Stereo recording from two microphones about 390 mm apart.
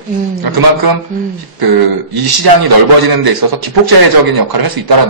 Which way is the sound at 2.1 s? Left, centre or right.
Right.